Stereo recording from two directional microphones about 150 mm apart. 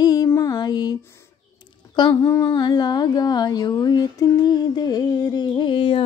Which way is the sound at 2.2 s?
25° left (ahead or behind).